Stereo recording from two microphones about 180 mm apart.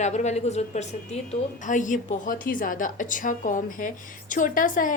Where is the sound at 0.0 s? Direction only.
40° left (ahead or behind).